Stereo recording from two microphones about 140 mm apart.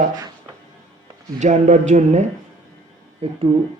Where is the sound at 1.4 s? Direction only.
55° right (ahead or behind).